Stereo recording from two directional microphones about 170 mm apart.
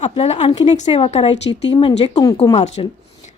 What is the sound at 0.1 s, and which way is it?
Speech, 35° left (ahead or behind).